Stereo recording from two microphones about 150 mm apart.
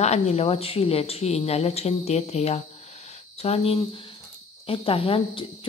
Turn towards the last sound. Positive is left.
turn(degrees=40)  # may be behind; listen again after turning